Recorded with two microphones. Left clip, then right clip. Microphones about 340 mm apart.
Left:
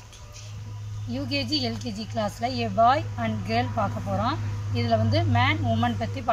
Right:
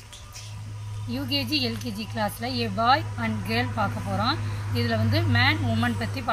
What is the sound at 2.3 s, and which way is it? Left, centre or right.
Speech, centre.